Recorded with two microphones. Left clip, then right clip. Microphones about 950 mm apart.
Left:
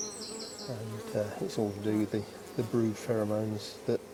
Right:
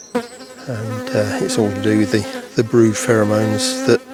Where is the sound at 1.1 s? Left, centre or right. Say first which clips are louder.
Right 14 dB; right.